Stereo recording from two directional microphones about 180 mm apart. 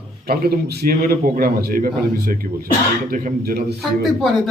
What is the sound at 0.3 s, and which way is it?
A man's voice, 60° right (ahead or behind).